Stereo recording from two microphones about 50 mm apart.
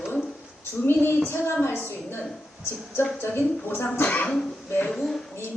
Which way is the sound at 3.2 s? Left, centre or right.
Left.